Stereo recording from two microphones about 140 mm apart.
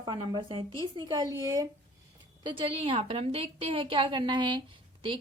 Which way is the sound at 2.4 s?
40° right (ahead or behind).